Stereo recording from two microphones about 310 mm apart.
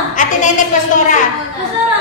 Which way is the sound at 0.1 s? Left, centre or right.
Left.